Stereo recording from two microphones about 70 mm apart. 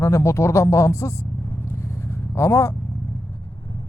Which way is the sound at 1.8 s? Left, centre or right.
Left.